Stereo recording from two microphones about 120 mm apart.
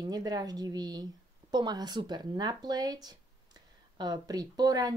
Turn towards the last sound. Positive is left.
turn(degrees=-35)  # may be behind; listen again after turning